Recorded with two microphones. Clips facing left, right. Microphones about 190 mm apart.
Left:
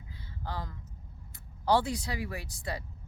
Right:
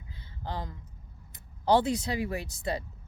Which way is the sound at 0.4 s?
20° right (ahead or behind).